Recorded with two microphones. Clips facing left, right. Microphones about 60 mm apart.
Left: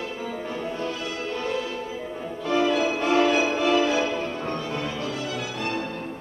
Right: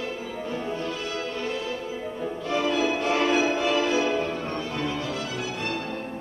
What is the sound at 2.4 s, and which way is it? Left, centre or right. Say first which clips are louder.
Music: left 3 dB; left.